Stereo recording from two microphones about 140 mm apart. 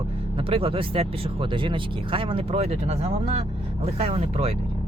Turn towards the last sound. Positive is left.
turn(degrees=-45)  # may be behind; listen again after turning